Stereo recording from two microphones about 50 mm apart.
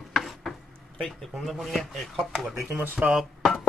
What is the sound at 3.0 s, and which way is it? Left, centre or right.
Speech, centre.